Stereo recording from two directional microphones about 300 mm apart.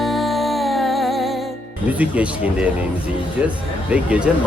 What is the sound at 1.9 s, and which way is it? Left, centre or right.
Speech, centre.